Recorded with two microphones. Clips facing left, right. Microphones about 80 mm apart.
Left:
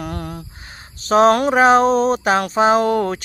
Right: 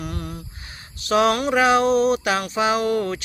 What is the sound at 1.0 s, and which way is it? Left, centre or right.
Speech, left.